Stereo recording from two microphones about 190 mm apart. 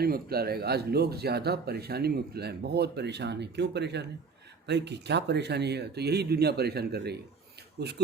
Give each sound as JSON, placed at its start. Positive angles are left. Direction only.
{"t": 0.0, "sound": "speech", "side_deg": -55}